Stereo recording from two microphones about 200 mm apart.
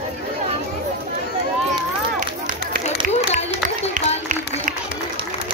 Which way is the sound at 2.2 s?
40° right (ahead or behind).